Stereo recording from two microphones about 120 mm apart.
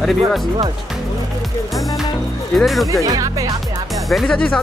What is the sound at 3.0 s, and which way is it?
Speech, 30° right (ahead or behind).